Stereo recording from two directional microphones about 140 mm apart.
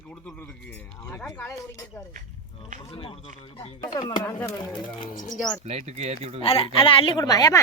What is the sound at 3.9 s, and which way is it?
Speech, 30° left (ahead or behind).